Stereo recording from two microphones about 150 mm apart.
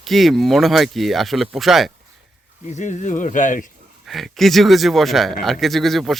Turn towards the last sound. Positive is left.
turn(degrees=0)  # may be behind; listen again after turning